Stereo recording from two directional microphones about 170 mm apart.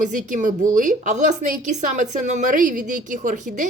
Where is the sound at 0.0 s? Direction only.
50° right (ahead or behind).